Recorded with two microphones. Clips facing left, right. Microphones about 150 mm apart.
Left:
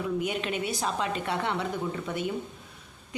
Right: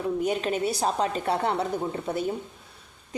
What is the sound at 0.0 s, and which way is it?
A woman's voice, 40° right (ahead or behind).